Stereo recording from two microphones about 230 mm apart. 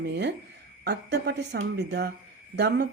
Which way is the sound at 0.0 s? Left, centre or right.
Right.